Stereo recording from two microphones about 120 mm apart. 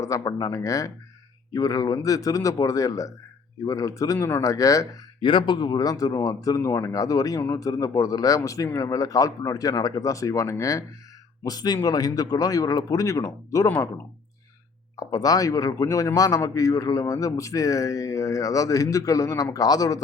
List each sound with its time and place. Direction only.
0.0 s speech: 30° left (ahead or behind)
5.2 s speech: 45° left (ahead or behind); by 13.7 s 25° left (ahead or behind)
14.9 s speech: 30° left (ahead or behind)